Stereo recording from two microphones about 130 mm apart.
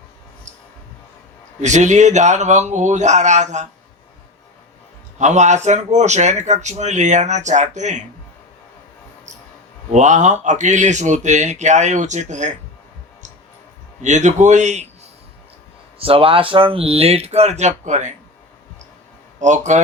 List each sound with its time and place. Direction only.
1.6 s speech: 65° right (ahead or behind)
5.1 s speech: 65° right (ahead or behind)
9.9 s speech: 65° right (ahead or behind)
14.0 s speech: 65° right (ahead or behind)
16.0 s speech: 45° right (ahead or behind); by 18.1 s 65° right (ahead or behind)
19.4 s speech: 65° right (ahead or behind)